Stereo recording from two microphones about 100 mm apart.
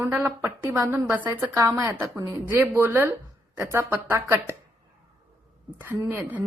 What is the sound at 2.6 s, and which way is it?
Speech, 20° right (ahead or behind).